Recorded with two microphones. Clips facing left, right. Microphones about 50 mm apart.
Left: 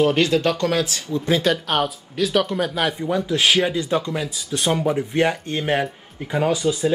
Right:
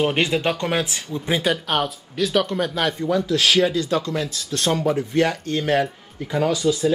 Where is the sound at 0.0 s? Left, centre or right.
Right.